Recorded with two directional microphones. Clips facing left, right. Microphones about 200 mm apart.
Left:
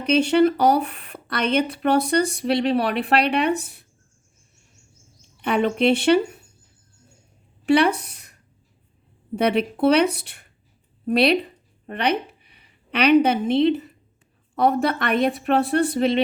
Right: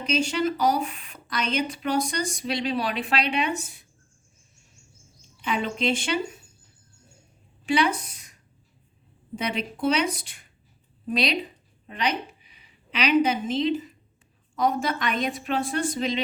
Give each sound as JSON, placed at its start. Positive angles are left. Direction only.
{"t": 0.0, "sound": "speech", "side_deg": 60}
{"t": 5.4, "sound": "speech", "side_deg": 60}
{"t": 7.6, "sound": "speech", "side_deg": 60}
{"t": 11.9, "sound": "a sound", "side_deg": 60}
{"t": 13.2, "sound": "speech", "side_deg": 60}